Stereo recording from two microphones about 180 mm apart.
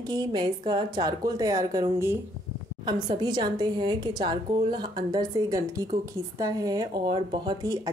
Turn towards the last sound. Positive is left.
turn(degrees=-20)  # may be behind; listen again after turning